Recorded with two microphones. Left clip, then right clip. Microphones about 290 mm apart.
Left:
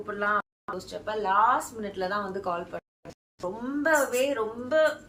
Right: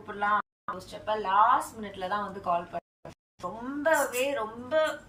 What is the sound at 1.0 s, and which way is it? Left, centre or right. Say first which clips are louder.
A woman's voice: even; centre.